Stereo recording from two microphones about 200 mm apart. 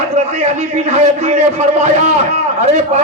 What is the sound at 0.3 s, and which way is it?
A man's voice, 35° right (ahead or behind).